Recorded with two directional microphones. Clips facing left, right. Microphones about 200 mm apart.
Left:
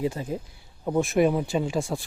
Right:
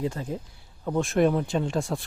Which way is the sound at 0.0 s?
10° left (ahead or behind).